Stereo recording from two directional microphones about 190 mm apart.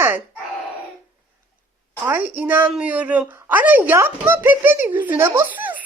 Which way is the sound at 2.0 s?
10° right (ahead or behind).